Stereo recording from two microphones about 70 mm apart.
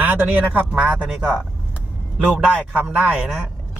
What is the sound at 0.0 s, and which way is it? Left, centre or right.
Speech, right.